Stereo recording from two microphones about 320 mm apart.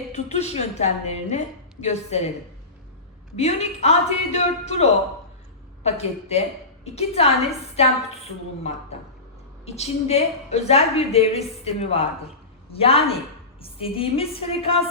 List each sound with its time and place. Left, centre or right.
0.1 s a woman's voice: centre
3.3 s a woman's voice: centre
8.9 s a woman's voice: centre